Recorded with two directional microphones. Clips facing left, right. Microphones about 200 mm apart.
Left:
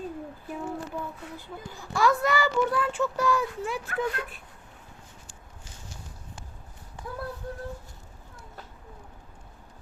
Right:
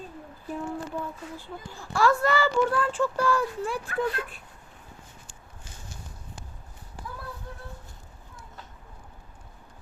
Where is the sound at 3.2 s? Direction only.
15° left (ahead or behind).